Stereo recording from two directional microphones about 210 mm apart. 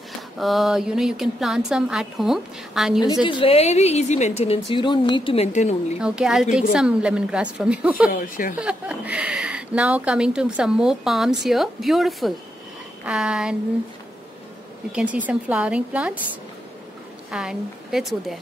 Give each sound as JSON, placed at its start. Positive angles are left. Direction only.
{"t": 0.4, "sound": "speech", "side_deg": 0}
{"t": 3.3, "sound": "speech", "side_deg": 25}
{"t": 5.9, "sound": "speech", "side_deg": -5}
{"t": 8.1, "sound": "speech", "side_deg": 40}
{"t": 8.5, "sound": "speech", "side_deg": -5}
{"t": 14.9, "sound": "speech", "side_deg": -5}
{"t": 17.3, "sound": "speech", "side_deg": -5}